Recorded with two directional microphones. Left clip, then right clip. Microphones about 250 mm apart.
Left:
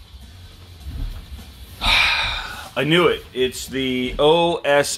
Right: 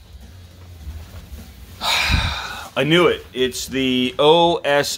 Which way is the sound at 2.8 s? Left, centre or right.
Centre.